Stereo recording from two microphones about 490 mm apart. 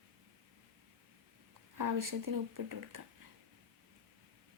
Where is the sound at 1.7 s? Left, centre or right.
Right.